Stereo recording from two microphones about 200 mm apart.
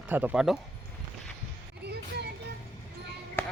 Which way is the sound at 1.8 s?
55° right (ahead or behind).